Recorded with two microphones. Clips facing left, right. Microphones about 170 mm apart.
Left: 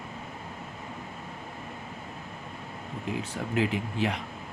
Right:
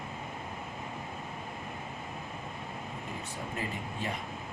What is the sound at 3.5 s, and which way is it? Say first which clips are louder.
Speech: left 11 dB; 85° left.